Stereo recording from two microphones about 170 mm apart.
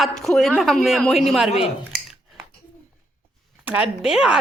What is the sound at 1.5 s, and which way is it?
Speech, 40° left (ahead or behind).